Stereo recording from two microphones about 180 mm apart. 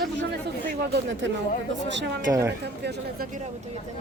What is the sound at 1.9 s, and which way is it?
Speech, 80° right.